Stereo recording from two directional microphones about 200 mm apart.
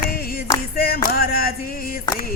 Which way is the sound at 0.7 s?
50° left (ahead or behind).